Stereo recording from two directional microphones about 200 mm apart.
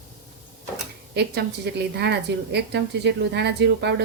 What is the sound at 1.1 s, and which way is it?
A woman's voice, 55° right (ahead or behind).